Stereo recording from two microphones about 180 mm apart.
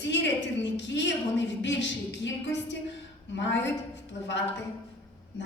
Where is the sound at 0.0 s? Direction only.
85° left.